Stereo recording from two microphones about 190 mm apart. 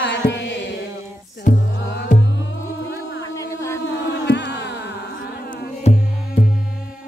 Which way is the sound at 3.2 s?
15° left (ahead or behind).